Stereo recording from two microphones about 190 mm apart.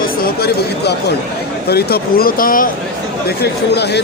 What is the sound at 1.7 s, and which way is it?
Speech, 55° left (ahead or behind).